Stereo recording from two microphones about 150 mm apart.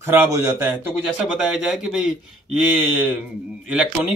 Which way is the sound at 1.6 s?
5° right (ahead or behind).